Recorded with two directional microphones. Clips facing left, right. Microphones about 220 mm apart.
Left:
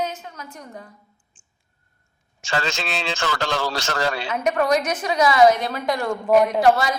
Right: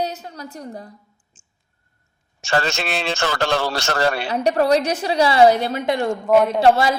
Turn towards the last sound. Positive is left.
turn(degrees=-30)  # may be behind; listen again after turning